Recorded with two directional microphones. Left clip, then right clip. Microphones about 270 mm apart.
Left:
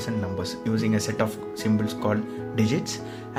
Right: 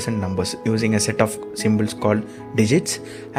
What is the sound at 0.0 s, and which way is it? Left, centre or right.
Speech, right.